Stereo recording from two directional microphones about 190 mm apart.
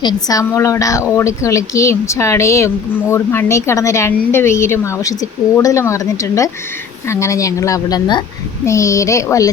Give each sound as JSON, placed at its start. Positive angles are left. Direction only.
{"t": 0.0, "sound": "a woman's voice", "side_deg": 20}